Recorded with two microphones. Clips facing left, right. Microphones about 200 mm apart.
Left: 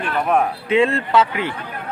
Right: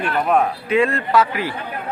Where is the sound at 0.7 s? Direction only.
25° left (ahead or behind).